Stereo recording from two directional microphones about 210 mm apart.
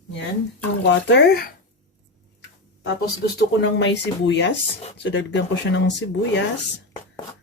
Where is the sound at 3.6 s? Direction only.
55° left (ahead or behind).